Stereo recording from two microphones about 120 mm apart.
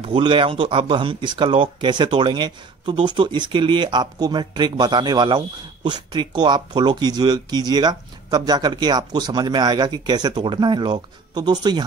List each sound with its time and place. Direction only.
0.0 s speech: 45° right (ahead or behind)